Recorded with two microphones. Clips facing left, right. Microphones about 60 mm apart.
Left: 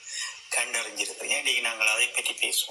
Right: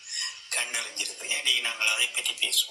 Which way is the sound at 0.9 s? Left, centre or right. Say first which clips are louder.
Left 3 dB; left.